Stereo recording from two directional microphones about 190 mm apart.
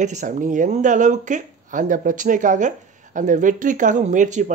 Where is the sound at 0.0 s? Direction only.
40° right (ahead or behind).